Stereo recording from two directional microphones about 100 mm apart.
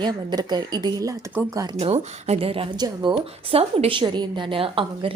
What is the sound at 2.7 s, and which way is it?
Speech, 50° right (ahead or behind).